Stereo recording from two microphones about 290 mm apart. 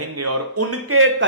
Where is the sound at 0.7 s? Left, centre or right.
Right.